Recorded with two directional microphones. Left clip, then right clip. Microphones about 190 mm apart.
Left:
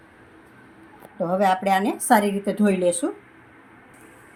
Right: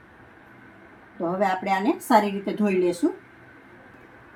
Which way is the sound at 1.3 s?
50° left (ahead or behind).